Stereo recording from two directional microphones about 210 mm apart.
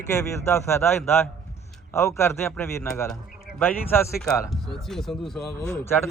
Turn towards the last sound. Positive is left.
turn(degrees=10)  # may be behind; listen again after turning